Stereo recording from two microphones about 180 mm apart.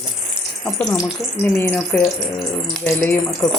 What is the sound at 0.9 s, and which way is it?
Speech, 15° left (ahead or behind).